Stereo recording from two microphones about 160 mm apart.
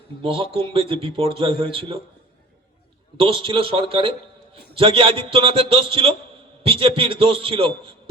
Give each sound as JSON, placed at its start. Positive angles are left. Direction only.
{"t": 0.2, "sound": "a man's voice", "side_deg": -35}
{"t": 3.2, "sound": "a man's voice", "side_deg": -35}